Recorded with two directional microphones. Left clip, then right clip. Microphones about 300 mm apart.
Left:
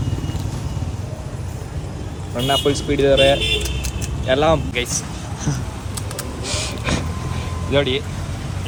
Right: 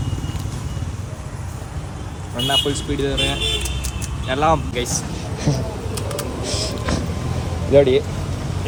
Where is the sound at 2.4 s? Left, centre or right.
Centre.